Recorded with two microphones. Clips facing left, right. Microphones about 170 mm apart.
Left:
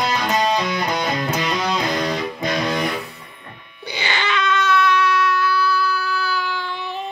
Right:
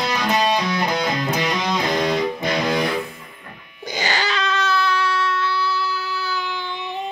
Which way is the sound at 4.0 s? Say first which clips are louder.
Even; 40° right (ahead or behind).